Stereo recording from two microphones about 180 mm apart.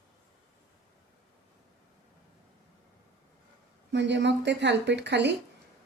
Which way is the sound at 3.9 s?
75° right (ahead or behind).